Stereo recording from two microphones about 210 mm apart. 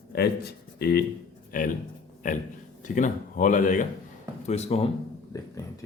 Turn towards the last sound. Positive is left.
turn(degrees=30)  # may be behind; listen again after turning